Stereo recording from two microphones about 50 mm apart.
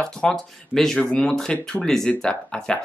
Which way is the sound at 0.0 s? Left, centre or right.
Centre.